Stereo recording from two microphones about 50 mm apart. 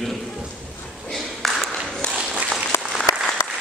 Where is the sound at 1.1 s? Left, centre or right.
Centre.